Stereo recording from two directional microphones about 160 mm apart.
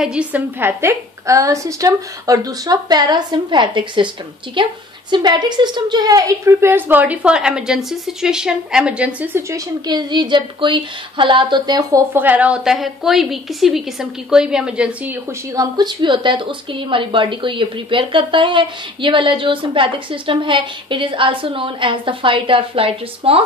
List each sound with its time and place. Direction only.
0.0 s a woman's voice: 5° right (ahead or behind)
9.8 s a woman's voice: 25° right (ahead or behind)
12.1 s a woman's voice: 10° right (ahead or behind)
15.5 s a woman's voice: 25° right (ahead or behind)